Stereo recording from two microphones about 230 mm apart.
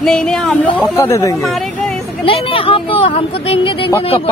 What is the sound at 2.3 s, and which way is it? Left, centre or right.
Speech, left.